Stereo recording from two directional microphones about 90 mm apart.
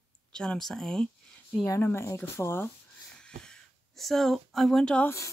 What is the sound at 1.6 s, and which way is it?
Speech, 30° left (ahead or behind).